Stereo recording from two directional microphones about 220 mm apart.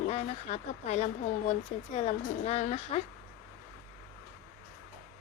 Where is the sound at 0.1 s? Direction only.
30° left (ahead or behind).